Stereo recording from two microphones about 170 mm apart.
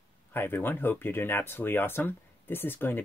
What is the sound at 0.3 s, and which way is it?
Speech, 10° left (ahead or behind).